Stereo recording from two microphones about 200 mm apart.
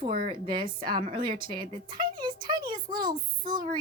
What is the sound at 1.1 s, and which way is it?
A woman's voice, 25° right (ahead or behind).